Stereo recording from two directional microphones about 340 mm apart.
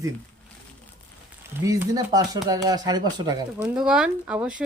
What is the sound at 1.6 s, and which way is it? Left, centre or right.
Speech, centre.